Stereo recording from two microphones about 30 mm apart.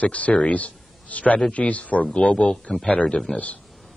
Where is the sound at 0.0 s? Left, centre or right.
Left.